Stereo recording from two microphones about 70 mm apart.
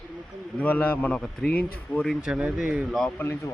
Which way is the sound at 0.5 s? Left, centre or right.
Left.